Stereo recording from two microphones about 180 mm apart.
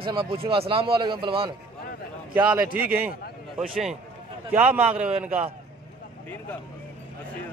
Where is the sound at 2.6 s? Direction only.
55° right (ahead or behind).